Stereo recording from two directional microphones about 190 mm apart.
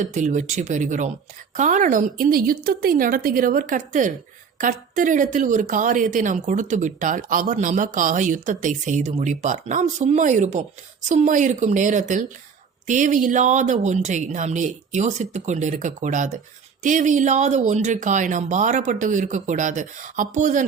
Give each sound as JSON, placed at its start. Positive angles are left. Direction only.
{"t": 0.0, "sound": "a woman's voice", "side_deg": -40}